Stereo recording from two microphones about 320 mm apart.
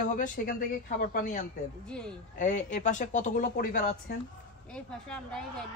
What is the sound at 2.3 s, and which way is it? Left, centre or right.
A man's voice, left.